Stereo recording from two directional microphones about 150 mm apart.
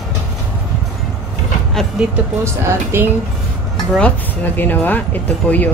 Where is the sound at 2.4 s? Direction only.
15° right (ahead or behind).